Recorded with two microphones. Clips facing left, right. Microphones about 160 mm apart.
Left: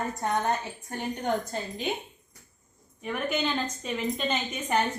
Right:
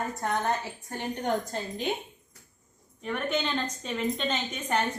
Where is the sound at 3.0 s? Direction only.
5° left (ahead or behind).